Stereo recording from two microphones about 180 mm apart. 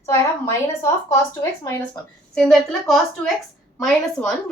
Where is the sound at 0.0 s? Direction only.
15° left (ahead or behind).